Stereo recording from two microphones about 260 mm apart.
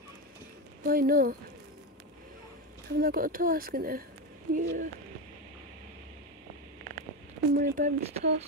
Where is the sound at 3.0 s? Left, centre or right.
Right.